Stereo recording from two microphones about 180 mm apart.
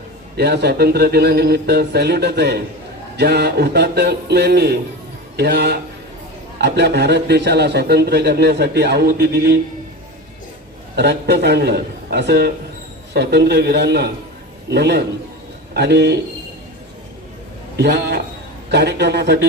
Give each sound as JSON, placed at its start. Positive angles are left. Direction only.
{"t": 0.3, "sound": "a man's voice", "side_deg": -65}
{"t": 10.9, "sound": "a man's voice", "side_deg": -65}
{"t": 17.7, "sound": "a man's voice", "side_deg": -65}